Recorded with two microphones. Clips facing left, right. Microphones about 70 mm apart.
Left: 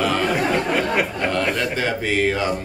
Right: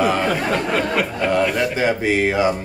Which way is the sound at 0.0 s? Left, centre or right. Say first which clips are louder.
Right 2 dB; centre.